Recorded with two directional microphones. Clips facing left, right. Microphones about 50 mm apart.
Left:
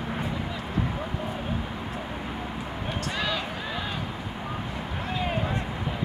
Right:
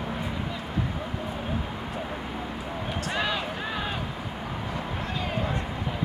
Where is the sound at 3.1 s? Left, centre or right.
Centre.